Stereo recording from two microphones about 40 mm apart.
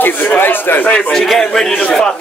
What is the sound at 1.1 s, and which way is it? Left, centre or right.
Speech, centre.